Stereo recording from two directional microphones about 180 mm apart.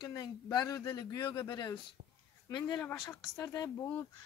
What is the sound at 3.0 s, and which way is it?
Speech, 20° left (ahead or behind).